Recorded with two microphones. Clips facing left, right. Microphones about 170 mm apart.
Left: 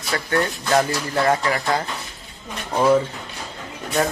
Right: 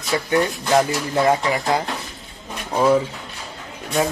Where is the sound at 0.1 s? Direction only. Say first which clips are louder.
Right 3 dB; 15° right (ahead or behind).